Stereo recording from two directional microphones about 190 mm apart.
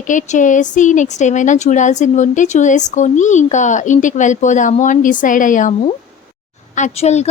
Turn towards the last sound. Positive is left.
turn(degrees=35)  # may be behind; listen again after turning